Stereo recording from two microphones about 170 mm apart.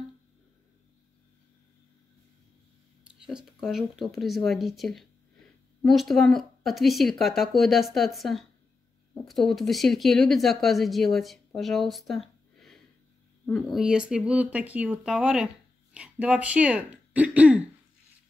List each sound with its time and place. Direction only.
3.2 s speech: 5° right (ahead or behind)